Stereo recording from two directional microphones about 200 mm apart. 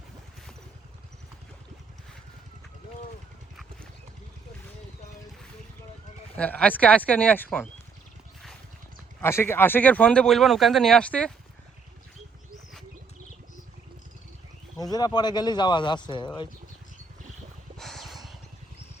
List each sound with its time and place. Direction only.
6.3 s speech: 5° left (ahead or behind)
9.2 s speech: 10° left (ahead or behind)
14.8 s speech: 20° left (ahead or behind)
17.7 s a sound: centre (ahead or behind)